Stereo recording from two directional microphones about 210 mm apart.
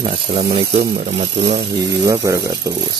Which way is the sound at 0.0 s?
30° right (ahead or behind).